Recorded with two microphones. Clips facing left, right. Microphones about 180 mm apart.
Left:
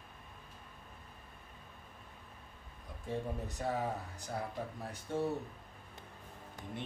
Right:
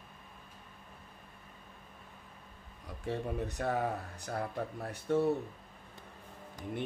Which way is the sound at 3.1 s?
65° right (ahead or behind).